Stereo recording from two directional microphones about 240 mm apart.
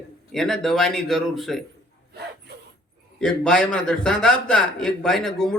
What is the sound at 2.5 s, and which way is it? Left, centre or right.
Dog, right.